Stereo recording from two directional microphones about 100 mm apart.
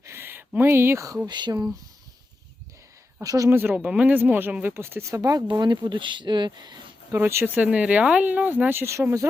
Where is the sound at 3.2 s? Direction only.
35° right (ahead or behind).